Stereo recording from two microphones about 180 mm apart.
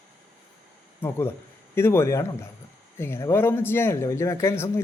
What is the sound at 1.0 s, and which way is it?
Speech, 10° left (ahead or behind).